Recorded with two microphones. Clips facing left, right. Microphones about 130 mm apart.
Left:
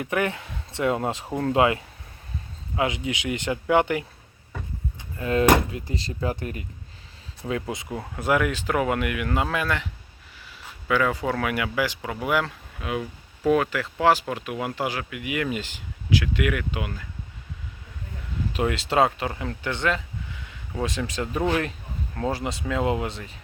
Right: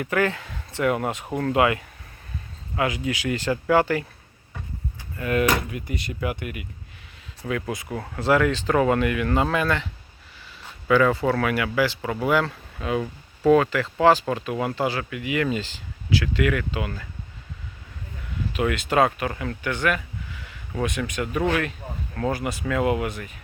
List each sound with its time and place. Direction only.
0.0 s speech: 20° left (ahead or behind)
5.1 s speech: 25° left (ahead or behind)
7.4 s speech: 25° left (ahead or behind)
7.9 s speech: 10° left (ahead or behind)
10.8 s speech: 5° left (ahead or behind)
18.5 s speech: 30° left (ahead or behind)
22.1 s speech: 25° left (ahead or behind)